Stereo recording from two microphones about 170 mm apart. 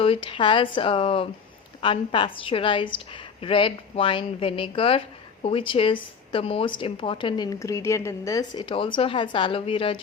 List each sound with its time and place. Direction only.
0.0 s a woman's voice: 30° left (ahead or behind)